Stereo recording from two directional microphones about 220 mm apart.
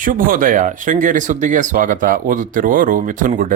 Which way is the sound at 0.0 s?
40° right (ahead or behind).